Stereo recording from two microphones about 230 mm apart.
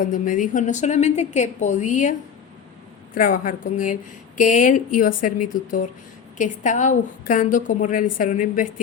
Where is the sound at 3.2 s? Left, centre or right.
Left.